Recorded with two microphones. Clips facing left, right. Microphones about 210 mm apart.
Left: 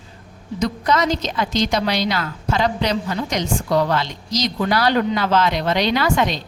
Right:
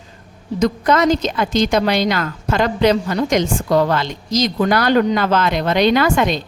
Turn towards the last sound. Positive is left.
turn(degrees=-50)  # may be behind; listen again after turning